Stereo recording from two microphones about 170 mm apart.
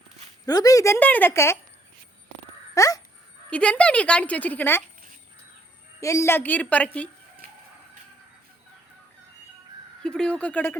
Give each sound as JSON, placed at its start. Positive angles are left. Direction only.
{"t": 0.4, "sound": "a woman's voice", "side_deg": 20}
{"t": 2.7, "sound": "crow", "side_deg": 20}
{"t": 3.5, "sound": "a woman's voice", "side_deg": 5}
{"t": 6.0, "sound": "a woman's voice", "side_deg": 20}
{"t": 10.0, "sound": "speech", "side_deg": 5}